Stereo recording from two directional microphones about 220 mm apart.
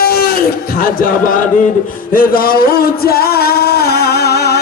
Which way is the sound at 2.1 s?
40° left (ahead or behind).